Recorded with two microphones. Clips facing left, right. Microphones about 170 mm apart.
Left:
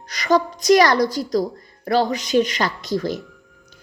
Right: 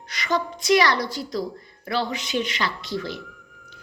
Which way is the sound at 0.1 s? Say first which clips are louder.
Left 7 dB; 40° left (ahead or behind).